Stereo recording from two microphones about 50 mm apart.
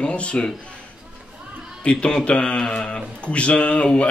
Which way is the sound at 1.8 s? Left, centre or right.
Left.